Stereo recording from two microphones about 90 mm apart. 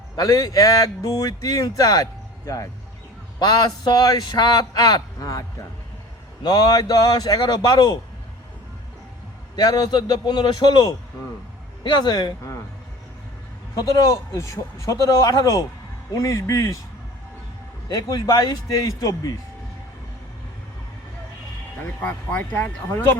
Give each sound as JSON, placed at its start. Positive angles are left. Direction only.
{"t": 0.2, "sound": "speech", "side_deg": 40}
{"t": 3.4, "sound": "speech", "side_deg": 50}
{"t": 9.6, "sound": "speech", "side_deg": 50}
{"t": 13.7, "sound": "speech", "side_deg": 45}
{"t": 17.8, "sound": "speech", "side_deg": 45}
{"t": 22.0, "sound": "speech", "side_deg": 15}